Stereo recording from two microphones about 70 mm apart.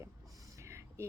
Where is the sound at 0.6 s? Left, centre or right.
Right.